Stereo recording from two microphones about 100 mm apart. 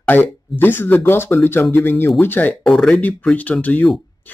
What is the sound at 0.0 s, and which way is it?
Speech, 20° left (ahead or behind).